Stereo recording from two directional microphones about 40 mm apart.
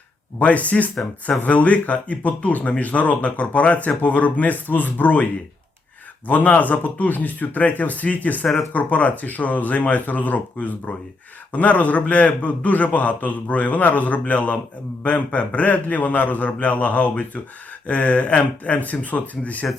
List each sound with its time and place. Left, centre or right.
0.3 s a man's voice: left